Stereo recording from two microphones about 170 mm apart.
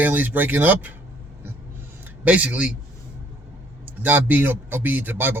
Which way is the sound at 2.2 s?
10° right (ahead or behind).